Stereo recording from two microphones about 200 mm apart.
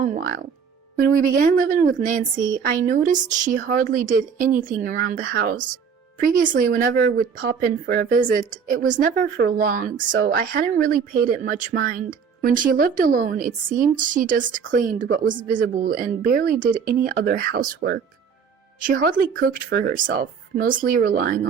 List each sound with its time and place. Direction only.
0.0 s speech: 40° right (ahead or behind)
18.8 s speech: 45° right (ahead or behind)